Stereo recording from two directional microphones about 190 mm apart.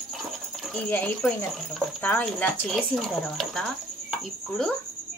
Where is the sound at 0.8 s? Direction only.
10° left (ahead or behind).